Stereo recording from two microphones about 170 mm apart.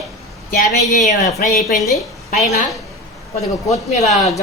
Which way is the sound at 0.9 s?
45° left (ahead or behind).